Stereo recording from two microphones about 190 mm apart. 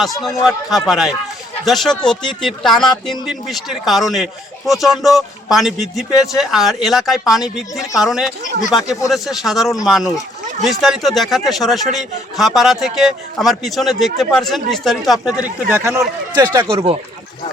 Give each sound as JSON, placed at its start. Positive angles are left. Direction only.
{"t": 0.2, "sound": "a man's voice", "side_deg": 0}
{"t": 15.7, "sound": "speech", "side_deg": -15}